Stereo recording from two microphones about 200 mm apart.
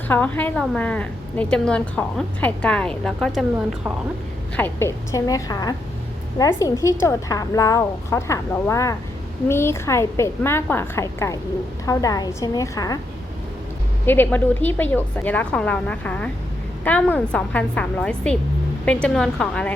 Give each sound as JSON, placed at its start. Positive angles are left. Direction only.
{"t": 0.1, "sound": "a woman's voice", "side_deg": 10}
{"t": 4.5, "sound": "a woman's voice", "side_deg": 10}
{"t": 14.0, "sound": "a woman's voice", "side_deg": 10}